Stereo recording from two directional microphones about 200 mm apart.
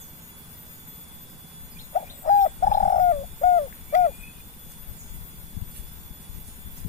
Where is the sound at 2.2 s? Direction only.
40° left (ahead or behind).